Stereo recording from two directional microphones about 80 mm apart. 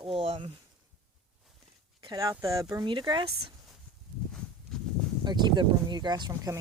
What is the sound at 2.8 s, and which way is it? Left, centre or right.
Speech, right.